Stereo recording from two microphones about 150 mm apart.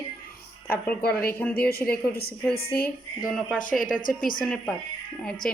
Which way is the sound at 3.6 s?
65° left (ahead or behind).